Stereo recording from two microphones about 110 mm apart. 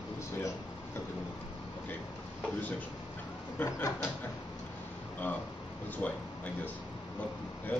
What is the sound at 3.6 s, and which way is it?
Speech, 25° left (ahead or behind).